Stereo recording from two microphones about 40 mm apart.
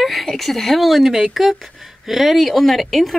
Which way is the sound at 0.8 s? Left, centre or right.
Centre.